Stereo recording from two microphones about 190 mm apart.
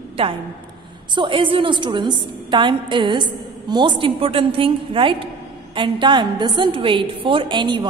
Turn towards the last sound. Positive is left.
turn(degrees=-25)  # may be behind; listen again after turning